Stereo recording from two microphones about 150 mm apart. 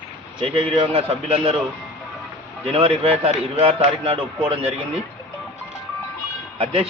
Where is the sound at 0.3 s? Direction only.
40° right (ahead or behind).